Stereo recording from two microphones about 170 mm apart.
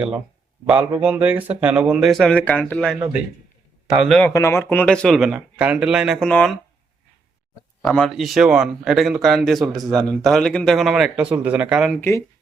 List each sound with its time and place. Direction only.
0.7 s speech: 10° right (ahead or behind)
4.2 s speech: 15° left (ahead or behind)
7.8 s speech: 5° left (ahead or behind)
11.9 s speech: 15° left (ahead or behind)